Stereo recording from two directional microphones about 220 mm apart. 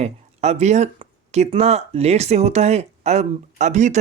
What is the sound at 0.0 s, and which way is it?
Speech, 30° right (ahead or behind).